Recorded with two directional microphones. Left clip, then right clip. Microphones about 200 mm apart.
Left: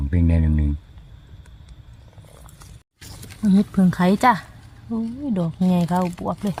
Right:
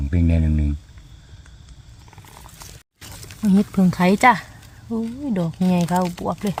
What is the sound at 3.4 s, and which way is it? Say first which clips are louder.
Speech: even; 5° right (ahead or behind).